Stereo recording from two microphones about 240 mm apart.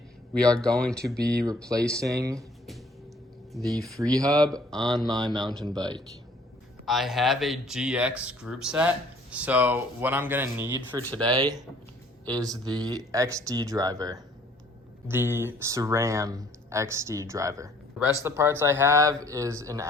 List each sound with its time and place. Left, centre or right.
0.5 s speech: centre
2.0 s speech: centre
3.5 s speech: centre
3.9 s speech: centre
4.7 s speech: centre
5.7 s speech: centre
6.8 s speech: centre
11.0 s speech: centre
11.3 s speech: centre